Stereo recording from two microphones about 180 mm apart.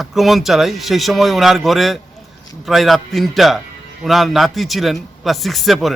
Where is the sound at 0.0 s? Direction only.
Centre (ahead or behind).